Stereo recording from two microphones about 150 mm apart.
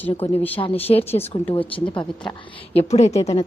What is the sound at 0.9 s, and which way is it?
Speech, 40° left (ahead or behind).